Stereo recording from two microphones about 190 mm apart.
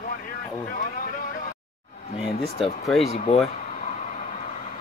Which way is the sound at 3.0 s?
35° left (ahead or behind).